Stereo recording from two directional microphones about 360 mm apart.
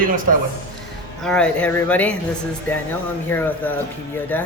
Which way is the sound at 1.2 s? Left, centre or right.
Centre.